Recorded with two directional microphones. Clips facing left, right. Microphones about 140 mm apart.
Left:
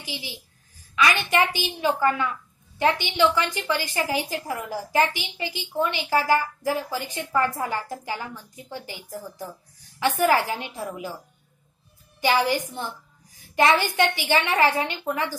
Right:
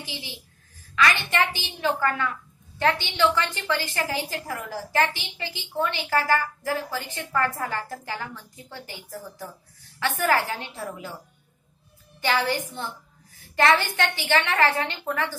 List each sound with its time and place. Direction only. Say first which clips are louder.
0.1 s a woman's voice: left 2 dB; 15° left (ahead or behind)
12.2 s a woman's voice: left 3 dB; 15° left (ahead or behind)